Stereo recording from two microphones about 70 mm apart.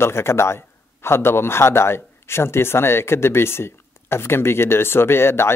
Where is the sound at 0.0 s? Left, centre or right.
Left.